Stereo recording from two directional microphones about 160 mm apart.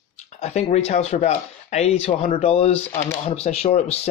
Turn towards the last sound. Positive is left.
turn(degrees=40)  # may be behind; listen again after turning